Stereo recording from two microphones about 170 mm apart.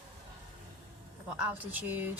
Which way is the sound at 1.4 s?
10° right (ahead or behind).